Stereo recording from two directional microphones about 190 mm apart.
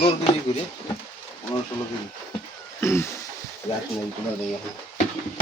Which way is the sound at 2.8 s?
15° left (ahead or behind).